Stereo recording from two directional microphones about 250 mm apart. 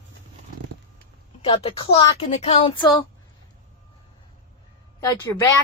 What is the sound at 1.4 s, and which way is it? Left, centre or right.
Speech, left.